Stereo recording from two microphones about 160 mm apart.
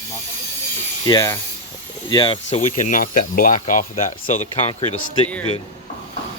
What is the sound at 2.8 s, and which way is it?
Speech, 55° left (ahead or behind).